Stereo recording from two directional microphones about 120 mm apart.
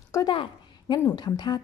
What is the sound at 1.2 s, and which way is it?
Speech, 35° left (ahead or behind).